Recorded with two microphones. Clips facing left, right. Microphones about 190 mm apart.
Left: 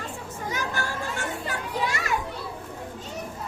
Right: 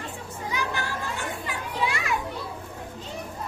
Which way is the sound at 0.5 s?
45° left (ahead or behind).